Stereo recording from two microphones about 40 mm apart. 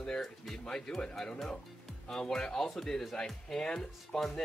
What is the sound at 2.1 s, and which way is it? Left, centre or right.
Speech, centre.